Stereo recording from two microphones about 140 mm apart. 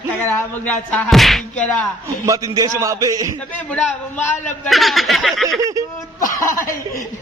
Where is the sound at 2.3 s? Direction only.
25° right (ahead or behind).